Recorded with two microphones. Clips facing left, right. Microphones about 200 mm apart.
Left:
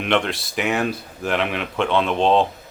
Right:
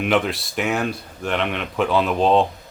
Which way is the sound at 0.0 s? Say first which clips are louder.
Right 1 dB; 5° right (ahead or behind).